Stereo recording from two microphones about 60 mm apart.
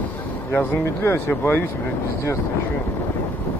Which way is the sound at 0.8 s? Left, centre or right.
Left.